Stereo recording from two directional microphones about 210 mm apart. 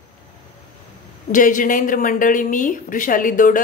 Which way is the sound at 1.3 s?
40° left (ahead or behind).